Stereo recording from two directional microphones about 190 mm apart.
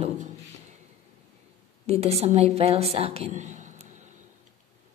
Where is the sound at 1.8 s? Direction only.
35° right (ahead or behind).